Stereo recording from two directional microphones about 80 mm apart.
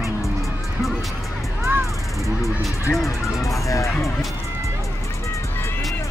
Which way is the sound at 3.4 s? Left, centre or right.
Left.